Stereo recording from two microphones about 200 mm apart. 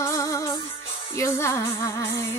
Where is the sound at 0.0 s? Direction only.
15° left (ahead or behind).